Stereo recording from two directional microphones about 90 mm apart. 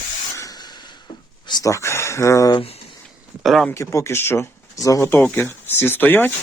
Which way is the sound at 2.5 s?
90° left.